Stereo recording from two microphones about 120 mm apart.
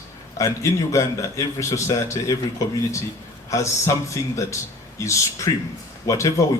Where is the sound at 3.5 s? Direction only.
25° left (ahead or behind).